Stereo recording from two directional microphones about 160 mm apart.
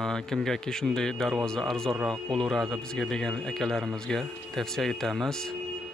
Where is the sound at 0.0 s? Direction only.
5° left (ahead or behind).